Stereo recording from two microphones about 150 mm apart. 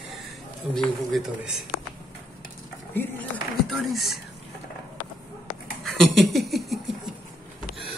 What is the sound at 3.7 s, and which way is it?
Speech, centre (ahead or behind).